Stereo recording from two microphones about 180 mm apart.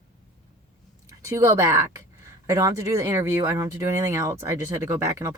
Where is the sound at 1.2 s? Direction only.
15° right (ahead or behind).